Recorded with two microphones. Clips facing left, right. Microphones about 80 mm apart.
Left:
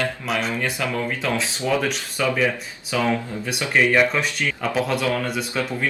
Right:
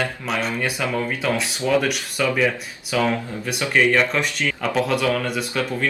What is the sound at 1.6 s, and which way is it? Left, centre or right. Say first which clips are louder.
Speech: right 3 dB; centre.